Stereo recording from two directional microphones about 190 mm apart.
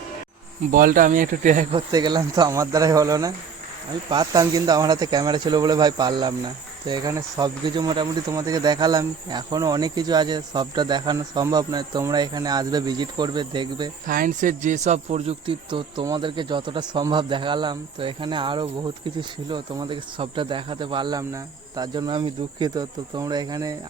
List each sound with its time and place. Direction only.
0.7 s speech: 45° right (ahead or behind)
1.7 s speech: 20° right (ahead or behind)
14.1 s speech: 45° right (ahead or behind); by 23.7 s 20° right (ahead or behind)